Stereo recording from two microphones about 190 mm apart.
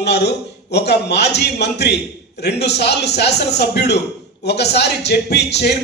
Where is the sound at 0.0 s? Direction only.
60° left (ahead or behind).